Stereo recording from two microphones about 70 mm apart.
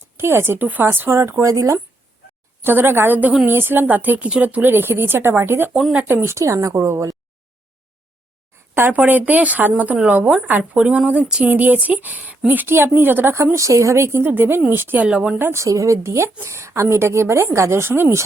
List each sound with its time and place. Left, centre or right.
0.2 s a woman's voice: right
2.6 s a woman's voice: right
6.3 s speech: right
8.9 s speech: right
10.2 s a woman's voice: centre; by 13.3 s right
13.3 s a woman's voice: right
15.0 s speech: centre
15.4 s a woman's voice: right
15.6 s a woman's voice: right